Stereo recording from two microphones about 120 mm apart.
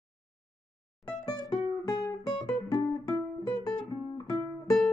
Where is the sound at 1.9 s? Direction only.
35° left (ahead or behind).